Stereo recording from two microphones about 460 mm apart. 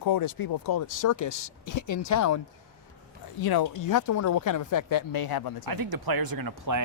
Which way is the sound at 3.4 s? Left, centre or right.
Left.